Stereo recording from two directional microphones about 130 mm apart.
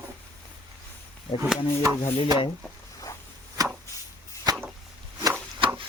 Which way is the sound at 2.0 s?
45° left (ahead or behind).